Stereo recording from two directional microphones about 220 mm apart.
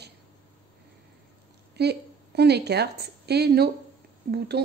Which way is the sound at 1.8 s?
50° right (ahead or behind).